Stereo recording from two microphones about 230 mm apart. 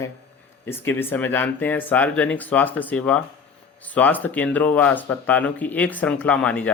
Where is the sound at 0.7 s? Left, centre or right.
Centre.